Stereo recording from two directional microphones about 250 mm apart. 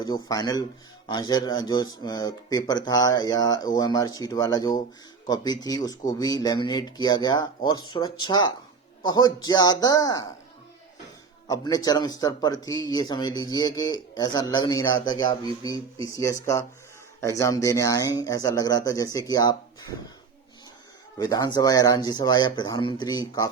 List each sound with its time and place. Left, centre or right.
0.0 s speech: centre
11.4 s speech: centre
21.2 s speech: centre